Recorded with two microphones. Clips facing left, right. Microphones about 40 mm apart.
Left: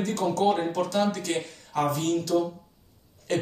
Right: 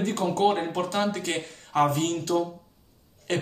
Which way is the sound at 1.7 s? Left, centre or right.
Right.